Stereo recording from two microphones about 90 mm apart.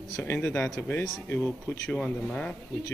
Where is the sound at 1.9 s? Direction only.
10° left (ahead or behind).